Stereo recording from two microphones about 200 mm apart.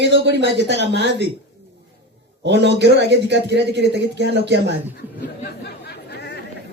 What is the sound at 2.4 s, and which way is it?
Speech, 60° right (ahead or behind).